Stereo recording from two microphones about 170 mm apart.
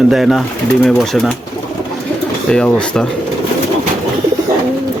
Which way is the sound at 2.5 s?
5° left (ahead or behind).